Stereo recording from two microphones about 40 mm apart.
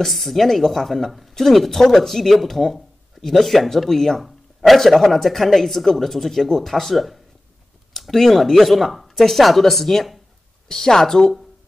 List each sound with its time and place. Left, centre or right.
0.0 s speech: centre